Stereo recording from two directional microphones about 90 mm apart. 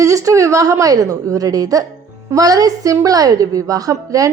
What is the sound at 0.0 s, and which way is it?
A woman's voice, 35° right (ahead or behind).